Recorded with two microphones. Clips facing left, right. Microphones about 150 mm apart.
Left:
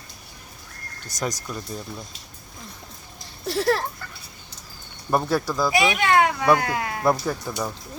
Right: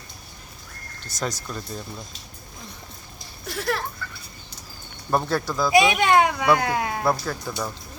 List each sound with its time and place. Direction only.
1.0 s speech: 15° left (ahead or behind)
3.4 s speech: 35° left (ahead or behind)
5.1 s speech: 10° left (ahead or behind)
5.7 s a child's voice: 20° right (ahead or behind)
7.0 s speech: 15° left (ahead or behind)